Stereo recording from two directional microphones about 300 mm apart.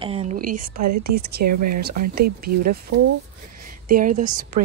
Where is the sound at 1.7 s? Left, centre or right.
Right.